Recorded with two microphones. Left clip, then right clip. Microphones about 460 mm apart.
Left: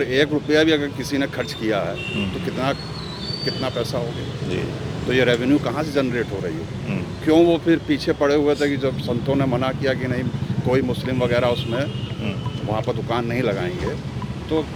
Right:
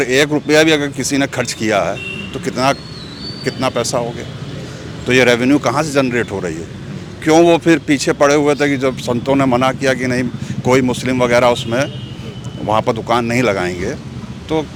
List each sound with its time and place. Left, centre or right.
0.0 s speech: right
3.4 s speech: right
5.0 s speech: right
7.3 s speech: right